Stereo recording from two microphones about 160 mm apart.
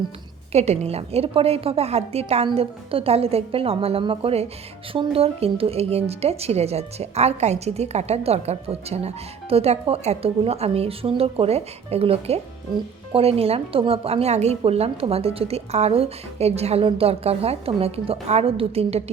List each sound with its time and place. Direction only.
0.5 s speech: 40° right (ahead or behind)